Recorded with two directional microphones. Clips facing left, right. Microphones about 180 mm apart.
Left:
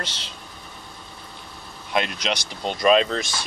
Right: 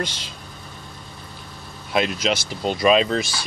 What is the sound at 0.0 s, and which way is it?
Speech, 10° right (ahead or behind).